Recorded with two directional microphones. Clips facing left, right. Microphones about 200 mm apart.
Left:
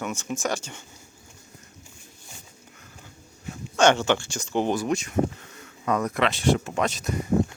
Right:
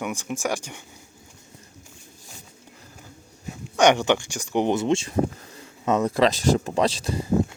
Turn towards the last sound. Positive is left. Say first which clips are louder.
# right 3 dB
turn(degrees=-30)  # may be behind; listen again after turning